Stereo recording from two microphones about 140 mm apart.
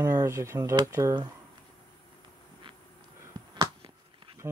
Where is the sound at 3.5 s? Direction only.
35° right (ahead or behind).